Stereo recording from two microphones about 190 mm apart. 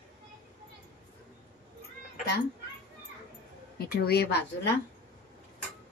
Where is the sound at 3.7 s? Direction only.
55° left (ahead or behind).